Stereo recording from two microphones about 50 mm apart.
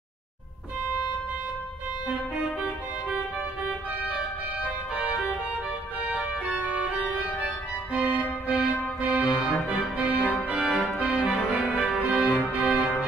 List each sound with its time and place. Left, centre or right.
3.6 s organ: right
6.5 s music: right
7.4 s organ: right
11.5 s music: centre